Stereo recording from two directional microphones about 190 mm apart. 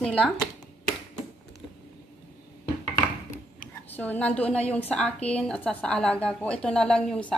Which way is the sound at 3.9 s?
10° left (ahead or behind).